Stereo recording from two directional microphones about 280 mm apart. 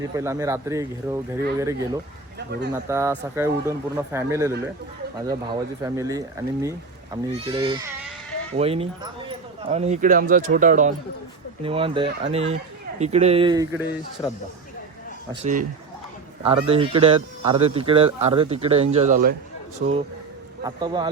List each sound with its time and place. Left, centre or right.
0.0 s a man's voice: centre
15.3 s a man's voice: right
20.7 s speech: centre